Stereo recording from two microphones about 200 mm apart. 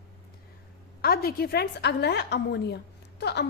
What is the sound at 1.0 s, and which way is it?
A woman's voice, 50° left (ahead or behind).